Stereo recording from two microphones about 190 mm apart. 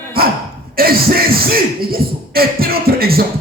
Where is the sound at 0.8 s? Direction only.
50° right (ahead or behind).